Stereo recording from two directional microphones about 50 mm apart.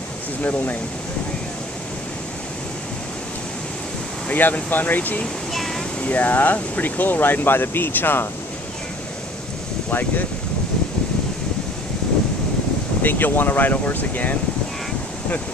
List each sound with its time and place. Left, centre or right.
0.4 s speech: left
4.3 s speech: left
5.5 s a sound: centre
6.0 s speech: left
9.8 s speech: left
13.0 s speech: left